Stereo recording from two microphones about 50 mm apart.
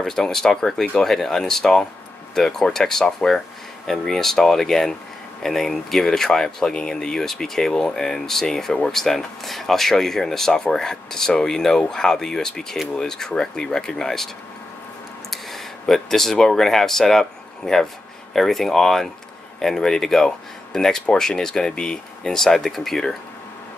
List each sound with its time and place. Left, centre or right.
0.0 s speech: centre
15.3 s speech: centre